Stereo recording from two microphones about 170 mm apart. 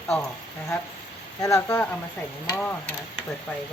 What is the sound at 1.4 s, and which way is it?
Speech, 20° left (ahead or behind).